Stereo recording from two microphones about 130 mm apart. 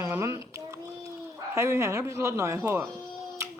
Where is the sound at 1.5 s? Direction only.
20° right (ahead or behind).